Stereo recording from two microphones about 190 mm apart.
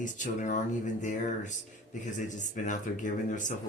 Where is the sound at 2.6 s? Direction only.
40° left (ahead or behind).